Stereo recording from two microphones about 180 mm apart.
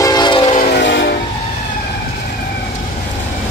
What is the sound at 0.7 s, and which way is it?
Train, 75° left (ahead or behind).